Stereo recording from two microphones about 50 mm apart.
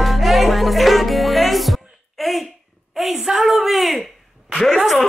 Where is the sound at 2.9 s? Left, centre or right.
Centre.